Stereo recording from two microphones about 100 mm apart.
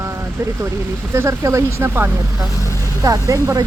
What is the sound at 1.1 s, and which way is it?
Speech, 30° right (ahead or behind).